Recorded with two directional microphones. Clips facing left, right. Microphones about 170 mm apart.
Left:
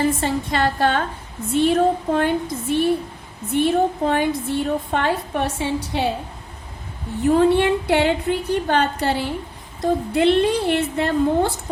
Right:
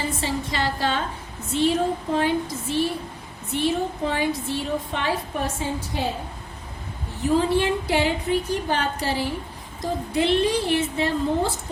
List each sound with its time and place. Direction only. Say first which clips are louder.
0.2 s a woman's voice: left 5 dB; 55° left (ahead or behind); by 6.1 s 75° left (ahead or behind)
7.3 s a woman's voice: left 4 dB; 60° left (ahead or behind)